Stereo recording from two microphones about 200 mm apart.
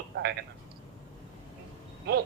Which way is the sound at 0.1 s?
60° right (ahead or behind).